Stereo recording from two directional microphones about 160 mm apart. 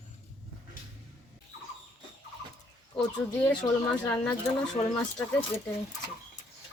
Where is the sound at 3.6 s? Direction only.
20° left (ahead or behind).